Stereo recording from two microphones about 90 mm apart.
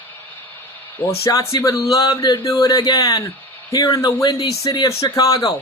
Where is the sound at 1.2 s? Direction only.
35° left (ahead or behind).